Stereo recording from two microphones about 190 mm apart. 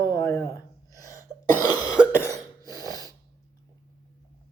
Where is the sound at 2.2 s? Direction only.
15° left (ahead or behind).